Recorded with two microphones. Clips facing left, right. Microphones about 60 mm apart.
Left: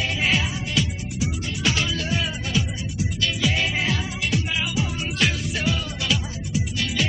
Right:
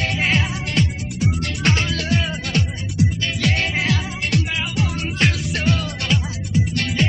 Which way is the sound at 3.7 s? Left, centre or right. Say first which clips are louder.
Right 3 dB; centre.